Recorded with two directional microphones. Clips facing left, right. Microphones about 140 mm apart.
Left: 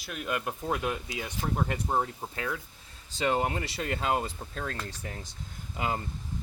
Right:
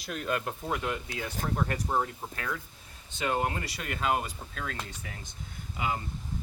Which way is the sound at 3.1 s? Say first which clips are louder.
Left 2 dB; 25° left (ahead or behind).